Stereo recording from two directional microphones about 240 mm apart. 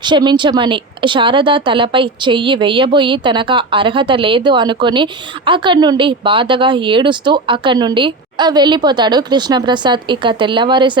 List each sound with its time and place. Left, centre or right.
0.0 s a woman's voice: centre